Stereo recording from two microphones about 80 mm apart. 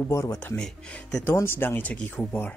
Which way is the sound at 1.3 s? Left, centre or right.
Left.